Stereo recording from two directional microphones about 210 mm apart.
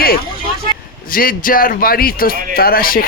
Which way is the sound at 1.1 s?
45° left (ahead or behind).